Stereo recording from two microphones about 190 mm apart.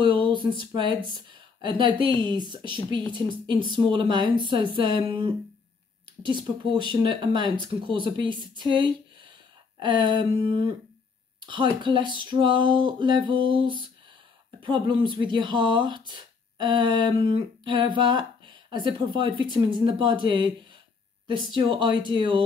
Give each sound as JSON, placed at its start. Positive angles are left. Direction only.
{"t": 0.0, "sound": "speech", "side_deg": -25}